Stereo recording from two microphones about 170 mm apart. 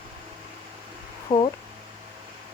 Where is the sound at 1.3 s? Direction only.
25° left (ahead or behind).